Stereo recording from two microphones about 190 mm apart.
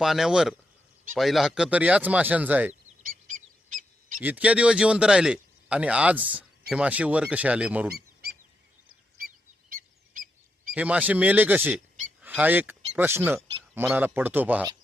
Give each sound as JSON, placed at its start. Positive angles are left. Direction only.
{"t": 0.0, "sound": "a man's voice", "side_deg": 0}
{"t": 2.8, "sound": "bird", "side_deg": -45}
{"t": 4.2, "sound": "a man's voice", "side_deg": -10}
{"t": 9.6, "sound": "a sound", "side_deg": -45}
{"t": 10.8, "sound": "a man's voice", "side_deg": -5}